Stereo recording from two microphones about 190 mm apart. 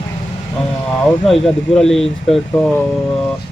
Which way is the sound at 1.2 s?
Centre (ahead or behind).